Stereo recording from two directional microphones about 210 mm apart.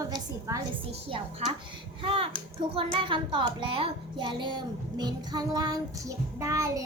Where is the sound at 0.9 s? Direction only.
25° right (ahead or behind).